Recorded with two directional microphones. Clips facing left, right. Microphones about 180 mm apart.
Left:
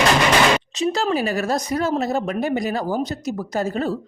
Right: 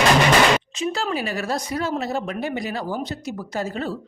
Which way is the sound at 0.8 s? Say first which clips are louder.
Left 4 dB; 40° left (ahead or behind).